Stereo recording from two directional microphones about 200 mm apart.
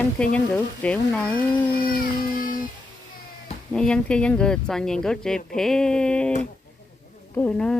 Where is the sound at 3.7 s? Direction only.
5° left (ahead or behind).